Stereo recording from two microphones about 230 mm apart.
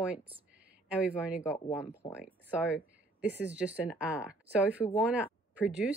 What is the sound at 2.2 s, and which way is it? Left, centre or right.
Speech, centre.